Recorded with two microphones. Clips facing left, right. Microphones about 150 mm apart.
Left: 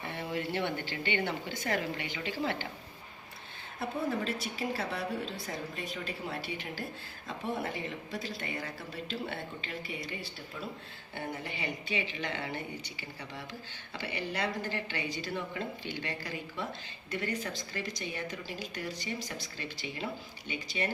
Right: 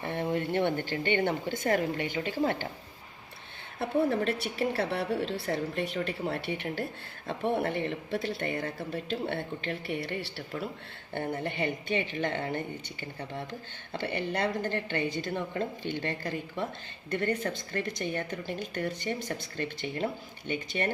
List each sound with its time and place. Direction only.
0.0 s a woman's voice: 50° right (ahead or behind)
3.8 s speech: 60° right (ahead or behind)
11.1 s a woman's voice: 55° right (ahead or behind)